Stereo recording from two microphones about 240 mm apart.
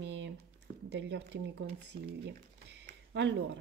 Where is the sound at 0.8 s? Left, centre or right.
Right.